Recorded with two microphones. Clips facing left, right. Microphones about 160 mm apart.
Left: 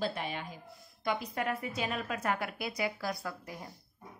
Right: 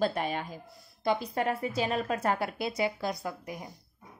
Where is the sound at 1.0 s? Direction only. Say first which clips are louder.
Right 5 dB; 30° right (ahead or behind).